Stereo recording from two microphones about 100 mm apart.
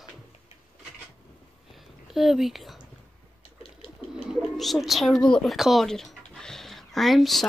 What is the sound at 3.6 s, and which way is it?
Bird, 90° left.